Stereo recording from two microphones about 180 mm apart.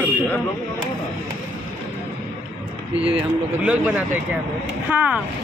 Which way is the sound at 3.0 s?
5° right (ahead or behind).